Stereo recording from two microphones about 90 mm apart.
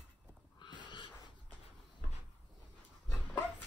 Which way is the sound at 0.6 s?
60° left (ahead or behind).